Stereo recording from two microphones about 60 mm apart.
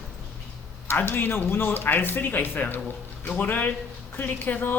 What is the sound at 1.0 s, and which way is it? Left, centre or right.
Speech, left.